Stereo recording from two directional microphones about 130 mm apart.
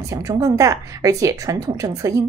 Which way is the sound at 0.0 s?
25° right (ahead or behind).